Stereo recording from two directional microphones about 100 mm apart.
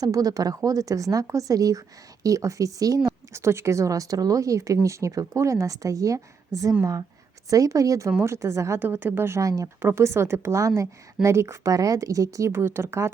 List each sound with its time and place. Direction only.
0.0 s a woman's voice: 35° right (ahead or behind)